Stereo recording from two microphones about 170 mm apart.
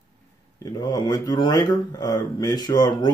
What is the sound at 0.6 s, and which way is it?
Speech, 20° left (ahead or behind).